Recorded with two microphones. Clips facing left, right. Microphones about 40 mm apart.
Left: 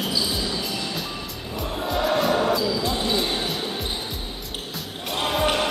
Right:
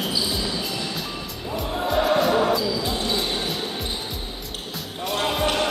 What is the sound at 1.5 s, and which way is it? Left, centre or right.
Basketball bounce, centre.